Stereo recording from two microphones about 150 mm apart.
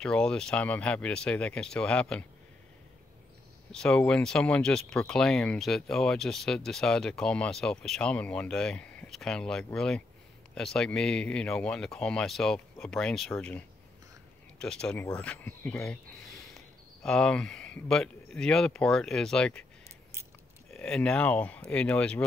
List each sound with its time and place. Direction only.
0.0 s speech: 5° left (ahead or behind)
3.7 s speech: 5° left (ahead or behind)
20.7 s speech: 5° left (ahead or behind)